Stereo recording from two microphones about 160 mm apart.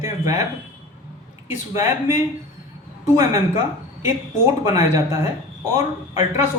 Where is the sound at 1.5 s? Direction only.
15° right (ahead or behind).